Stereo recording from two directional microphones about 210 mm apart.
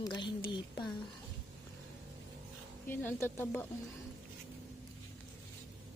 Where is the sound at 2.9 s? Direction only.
10° left (ahead or behind).